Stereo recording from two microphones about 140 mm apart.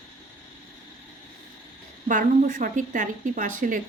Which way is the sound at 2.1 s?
70° right (ahead or behind).